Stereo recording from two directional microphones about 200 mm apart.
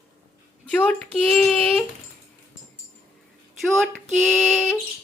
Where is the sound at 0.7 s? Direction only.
5° left (ahead or behind).